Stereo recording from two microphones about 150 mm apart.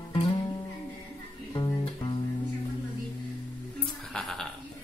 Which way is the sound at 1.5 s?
30° left (ahead or behind).